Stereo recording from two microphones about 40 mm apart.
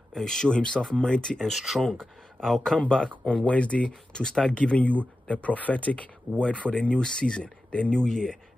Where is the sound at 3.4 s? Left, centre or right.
Left.